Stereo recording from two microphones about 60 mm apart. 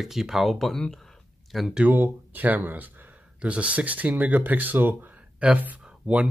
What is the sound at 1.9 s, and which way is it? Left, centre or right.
Speech, right.